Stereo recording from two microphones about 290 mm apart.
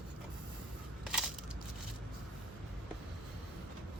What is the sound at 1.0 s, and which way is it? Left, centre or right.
Crushing, centre.